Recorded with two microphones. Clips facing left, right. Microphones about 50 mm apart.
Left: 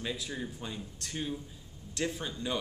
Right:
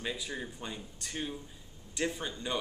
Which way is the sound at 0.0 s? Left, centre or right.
Centre.